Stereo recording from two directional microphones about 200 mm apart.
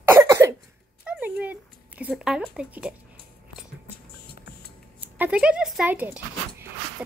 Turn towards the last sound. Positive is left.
turn(degrees=-10)  # may be behind; listen again after turning